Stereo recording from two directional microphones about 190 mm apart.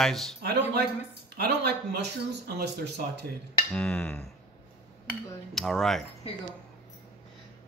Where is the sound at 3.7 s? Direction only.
5° left (ahead or behind).